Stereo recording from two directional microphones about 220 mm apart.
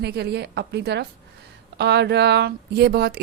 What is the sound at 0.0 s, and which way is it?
Speech, 50° right (ahead or behind).